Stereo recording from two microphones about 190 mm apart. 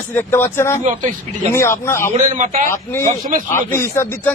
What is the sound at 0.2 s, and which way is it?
Speech, 10° left (ahead or behind).